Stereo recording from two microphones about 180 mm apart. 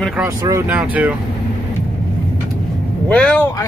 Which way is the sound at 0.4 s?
20° right (ahead or behind).